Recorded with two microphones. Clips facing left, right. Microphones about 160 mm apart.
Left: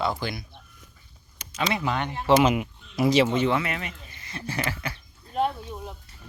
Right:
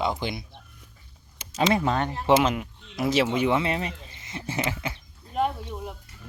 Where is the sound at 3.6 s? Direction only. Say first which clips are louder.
Right 3 dB; 30° right (ahead or behind).